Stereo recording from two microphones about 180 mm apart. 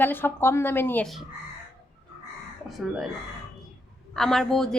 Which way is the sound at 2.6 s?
Centre (ahead or behind).